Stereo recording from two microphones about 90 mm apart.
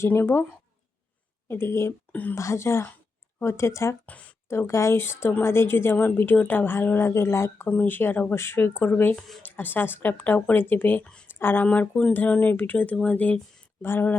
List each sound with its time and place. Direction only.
0.0 s a woman's voice: 25° left (ahead or behind)
1.5 s a woman's voice: 30° left (ahead or behind)
4.0 s speech: 15° left (ahead or behind)
4.4 s a woman's voice: 30° left (ahead or behind)
7.7 s a woman's voice: 20° left (ahead or behind)
9.1 s speech: centre (ahead or behind)
9.4 s a woman's voice: 20° left (ahead or behind)
11.0 s speech: 10° left (ahead or behind)
11.3 s a woman's voice: 25° left (ahead or behind)